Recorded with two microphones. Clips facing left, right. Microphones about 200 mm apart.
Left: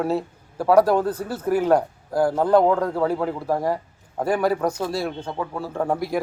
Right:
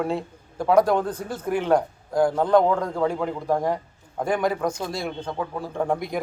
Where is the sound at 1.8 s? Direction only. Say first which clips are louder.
Even; 35° left (ahead or behind).